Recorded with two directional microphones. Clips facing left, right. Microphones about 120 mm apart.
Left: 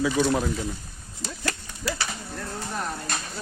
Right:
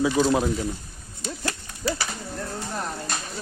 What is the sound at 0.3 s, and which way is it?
Speech, 15° right (ahead or behind).